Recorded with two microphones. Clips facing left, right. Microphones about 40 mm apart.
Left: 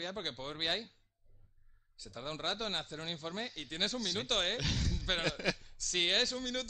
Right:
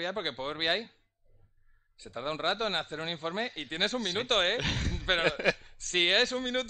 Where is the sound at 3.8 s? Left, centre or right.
Centre.